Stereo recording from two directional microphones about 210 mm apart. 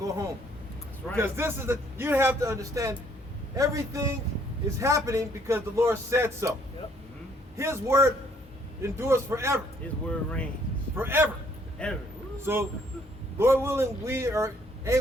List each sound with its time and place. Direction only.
1.1 s a man's voice: 10° right (ahead or behind)
7.5 s a man's voice: 15° right (ahead or behind)
10.1 s speech: 5° left (ahead or behind)
10.9 s a man's voice: 10° right (ahead or behind)
11.8 s speech: 5° left (ahead or behind)
12.5 s a man's voice: 10° right (ahead or behind)